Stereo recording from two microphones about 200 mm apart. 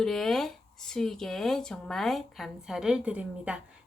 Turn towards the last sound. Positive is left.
turn(degrees=-5)  # may be behind; listen again after turning